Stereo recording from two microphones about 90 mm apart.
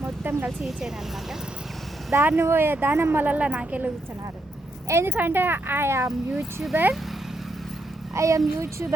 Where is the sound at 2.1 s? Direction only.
25° right (ahead or behind).